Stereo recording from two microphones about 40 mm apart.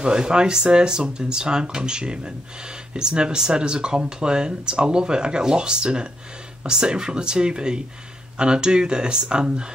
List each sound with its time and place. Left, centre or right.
0.0 s speech: centre